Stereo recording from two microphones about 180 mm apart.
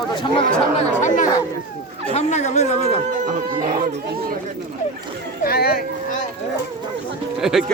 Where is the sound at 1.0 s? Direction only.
45° left (ahead or behind).